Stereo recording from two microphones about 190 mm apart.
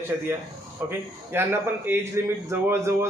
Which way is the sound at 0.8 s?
10° right (ahead or behind).